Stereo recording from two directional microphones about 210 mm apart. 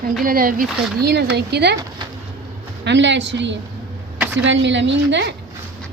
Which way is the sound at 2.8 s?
55° right (ahead or behind).